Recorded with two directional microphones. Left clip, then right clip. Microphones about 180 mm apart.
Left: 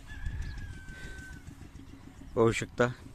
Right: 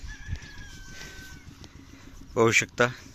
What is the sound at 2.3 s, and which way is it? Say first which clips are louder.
Speech: right 6 dB; centre (ahead or behind).